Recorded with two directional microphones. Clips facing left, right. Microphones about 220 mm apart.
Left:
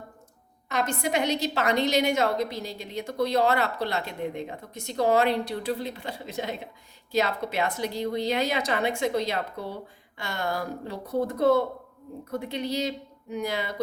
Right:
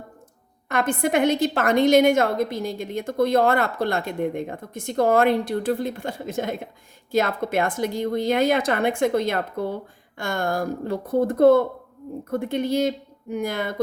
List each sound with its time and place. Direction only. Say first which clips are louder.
0.7 s a woman's voice: right 5 dB; 55° right (ahead or behind)